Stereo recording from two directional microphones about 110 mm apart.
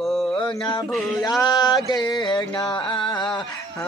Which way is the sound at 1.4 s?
40° left (ahead or behind).